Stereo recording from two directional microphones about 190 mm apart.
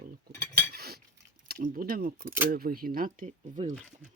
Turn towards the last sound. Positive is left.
turn(degrees=-40)  # may be behind; listen again after turning